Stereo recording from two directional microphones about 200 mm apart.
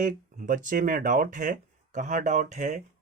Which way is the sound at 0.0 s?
40° right (ahead or behind).